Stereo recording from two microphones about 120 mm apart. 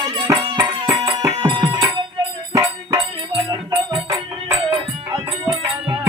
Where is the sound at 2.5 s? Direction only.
25° right (ahead or behind).